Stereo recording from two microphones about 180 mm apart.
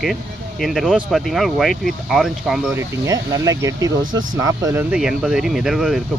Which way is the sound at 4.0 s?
90° right.